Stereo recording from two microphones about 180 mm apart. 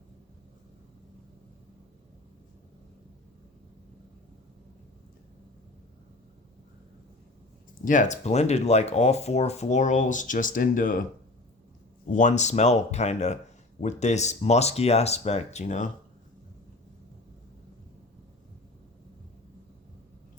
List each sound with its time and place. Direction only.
7.9 s speech: 45° left (ahead or behind)
12.1 s speech: 40° left (ahead or behind)